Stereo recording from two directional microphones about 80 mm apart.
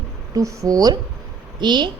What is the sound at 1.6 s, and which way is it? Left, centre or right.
Speech, right.